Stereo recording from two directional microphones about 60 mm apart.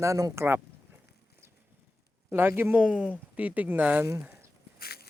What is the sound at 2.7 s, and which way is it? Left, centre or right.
Speech, centre.